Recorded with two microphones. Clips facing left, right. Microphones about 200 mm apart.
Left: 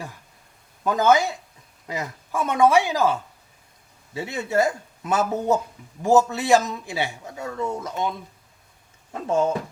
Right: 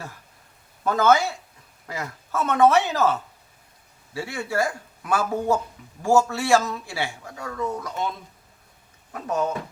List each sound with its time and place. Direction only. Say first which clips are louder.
0.9 s a man's voice: left 1 dB; 15° left (ahead or behind)
9.2 s a man's voice: left 4 dB; 25° left (ahead or behind)